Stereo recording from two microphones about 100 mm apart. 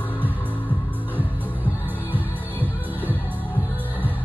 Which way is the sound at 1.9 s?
20° right (ahead or behind).